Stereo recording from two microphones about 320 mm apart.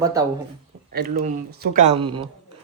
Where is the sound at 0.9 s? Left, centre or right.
Right.